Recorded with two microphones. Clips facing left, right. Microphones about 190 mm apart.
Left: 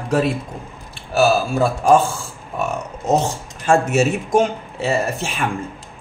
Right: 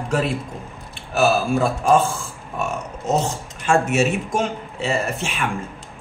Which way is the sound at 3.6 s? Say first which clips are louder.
Left 2 dB; 40° left (ahead or behind).